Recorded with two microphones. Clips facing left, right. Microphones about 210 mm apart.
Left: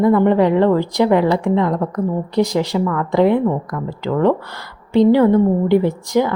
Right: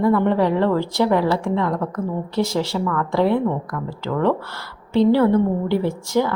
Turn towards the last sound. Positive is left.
turn(degrees=15)  # may be behind; listen again after turning